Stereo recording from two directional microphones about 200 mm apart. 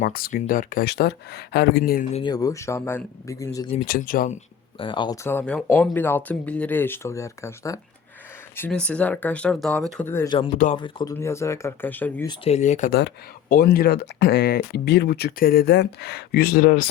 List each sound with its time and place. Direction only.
0.0 s speech: 45° left (ahead or behind)
2.1 s speech: 20° left (ahead or behind)
3.8 s speech: 45° left (ahead or behind)
4.8 s speech: 25° left (ahead or behind)
10.8 s speech: 25° left (ahead or behind)
12.3 s speech: 35° left (ahead or behind)
12.9 s speech: 60° left (ahead or behind); by 16.8 s 45° left (ahead or behind)